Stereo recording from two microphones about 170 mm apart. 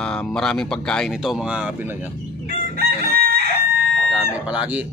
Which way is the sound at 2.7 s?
65° right (ahead or behind).